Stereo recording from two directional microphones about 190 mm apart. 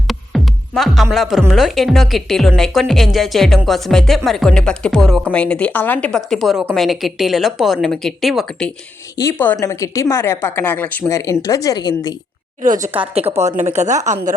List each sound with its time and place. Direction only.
0.1 s music: centre (ahead or behind)
1.1 s a woman's voice: centre (ahead or behind)
9.1 s a woman's voice: 15° left (ahead or behind)
13.3 s a woman's voice: 35° right (ahead or behind)